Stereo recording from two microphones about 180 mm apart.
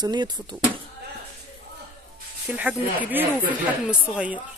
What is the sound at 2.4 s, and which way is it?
Speech, 10° right (ahead or behind).